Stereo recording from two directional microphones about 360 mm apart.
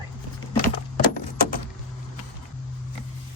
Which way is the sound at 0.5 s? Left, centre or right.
Left.